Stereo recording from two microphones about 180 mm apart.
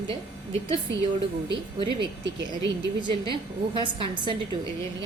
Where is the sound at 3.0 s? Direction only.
25° right (ahead or behind).